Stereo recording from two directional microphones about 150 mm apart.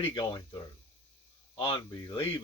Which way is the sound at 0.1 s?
30° left (ahead or behind).